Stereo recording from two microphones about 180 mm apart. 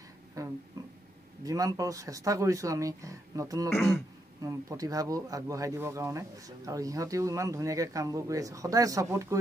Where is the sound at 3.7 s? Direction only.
15° left (ahead or behind).